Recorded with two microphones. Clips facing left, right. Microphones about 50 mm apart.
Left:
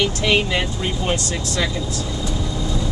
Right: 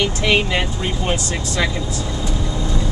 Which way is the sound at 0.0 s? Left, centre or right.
Centre.